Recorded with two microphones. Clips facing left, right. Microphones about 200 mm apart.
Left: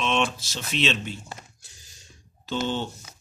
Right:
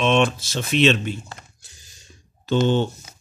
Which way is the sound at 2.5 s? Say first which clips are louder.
Right 8 dB; 60° right (ahead or behind).